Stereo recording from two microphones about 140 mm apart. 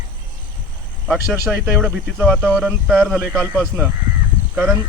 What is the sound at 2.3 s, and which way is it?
Speech, 10° left (ahead or behind).